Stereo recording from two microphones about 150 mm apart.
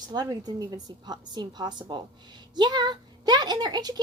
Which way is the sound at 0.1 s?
25° right (ahead or behind).